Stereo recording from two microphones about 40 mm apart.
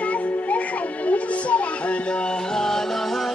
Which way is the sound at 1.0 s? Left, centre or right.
Left.